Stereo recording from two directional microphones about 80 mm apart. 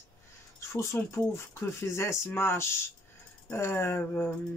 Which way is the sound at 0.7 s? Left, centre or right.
Left.